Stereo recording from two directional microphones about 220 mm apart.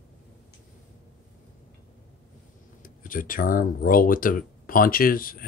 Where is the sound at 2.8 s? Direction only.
40° left (ahead or behind).